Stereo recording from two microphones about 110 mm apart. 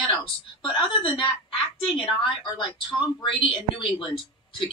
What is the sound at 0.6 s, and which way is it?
A woman's voice, 45° left (ahead or behind).